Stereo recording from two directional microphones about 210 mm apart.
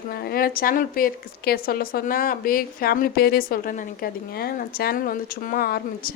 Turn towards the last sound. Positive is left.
turn(degrees=45)  # may be behind; listen again after turning